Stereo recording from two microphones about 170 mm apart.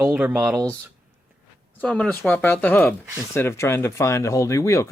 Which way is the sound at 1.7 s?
5° left (ahead or behind).